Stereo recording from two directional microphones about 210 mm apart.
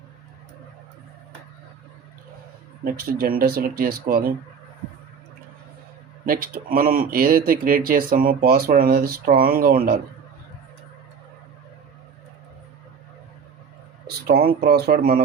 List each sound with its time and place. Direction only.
2.8 s speech: 45° right (ahead or behind)
6.2 s speech: 45° right (ahead or behind)
14.3 s speech: 45° right (ahead or behind)